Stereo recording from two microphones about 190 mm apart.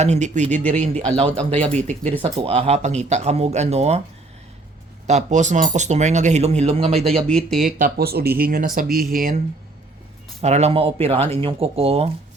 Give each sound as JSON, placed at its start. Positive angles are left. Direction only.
{"t": 0.0, "sound": "speech", "side_deg": -35}
{"t": 0.6, "sound": "a man's voice", "side_deg": 5}
{"t": 0.9, "sound": "speech", "side_deg": -35}
{"t": 5.0, "sound": "speech", "side_deg": -40}
{"t": 7.3, "sound": "speech", "side_deg": 5}
{"t": 7.6, "sound": "speech", "side_deg": -50}
{"t": 10.4, "sound": "speech", "side_deg": -35}